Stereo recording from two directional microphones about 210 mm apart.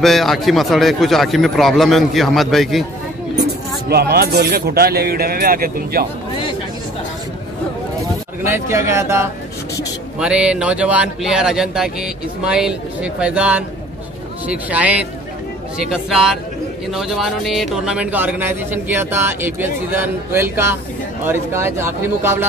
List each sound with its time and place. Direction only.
0.0 s speech: centre (ahead or behind)
3.9 s a man's voice: 45° right (ahead or behind)
8.5 s speech: 15° right (ahead or behind)